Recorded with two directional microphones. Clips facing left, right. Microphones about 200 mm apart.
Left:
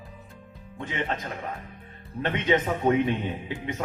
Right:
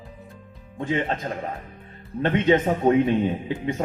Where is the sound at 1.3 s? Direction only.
35° right (ahead or behind).